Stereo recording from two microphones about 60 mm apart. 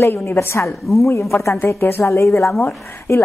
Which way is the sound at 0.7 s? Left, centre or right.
Centre.